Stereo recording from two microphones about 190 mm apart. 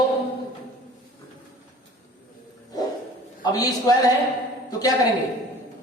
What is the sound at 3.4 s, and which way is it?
A man's voice, 20° left (ahead or behind).